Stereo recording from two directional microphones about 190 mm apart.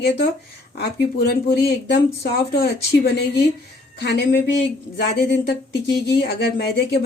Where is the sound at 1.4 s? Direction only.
60° left (ahead or behind).